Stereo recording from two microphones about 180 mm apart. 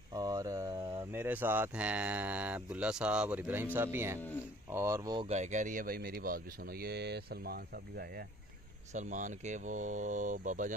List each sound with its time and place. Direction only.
0.1 s speech: 20° right (ahead or behind)
5.2 s speech: 40° right (ahead or behind); by 8.3 s 55° right (ahead or behind)
8.9 s speech: 45° right (ahead or behind)